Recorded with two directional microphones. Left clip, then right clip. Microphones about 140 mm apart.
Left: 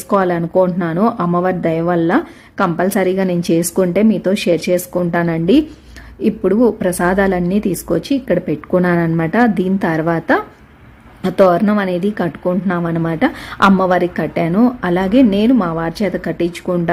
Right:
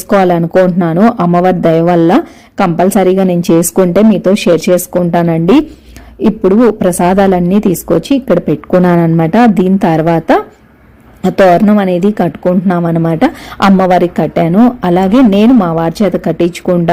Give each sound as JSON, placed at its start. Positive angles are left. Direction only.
{"t": 0.1, "sound": "a woman's voice", "side_deg": -25}